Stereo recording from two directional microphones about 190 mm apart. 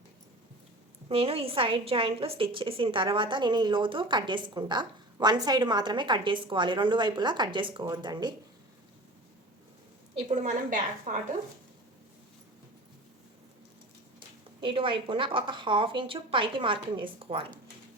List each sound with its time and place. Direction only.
1.0 s a woman's voice: 30° right (ahead or behind)
10.2 s a woman's voice: 40° right (ahead or behind)
14.6 s a woman's voice: 25° right (ahead or behind)